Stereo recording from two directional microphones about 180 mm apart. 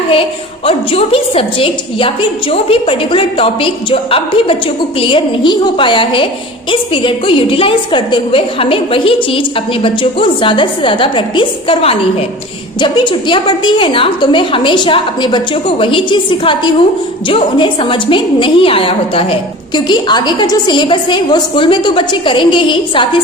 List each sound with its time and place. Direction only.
0.1 s a woman's voice: 30° left (ahead or behind)